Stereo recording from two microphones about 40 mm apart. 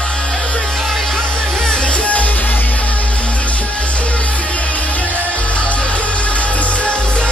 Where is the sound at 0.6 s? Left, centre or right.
Centre.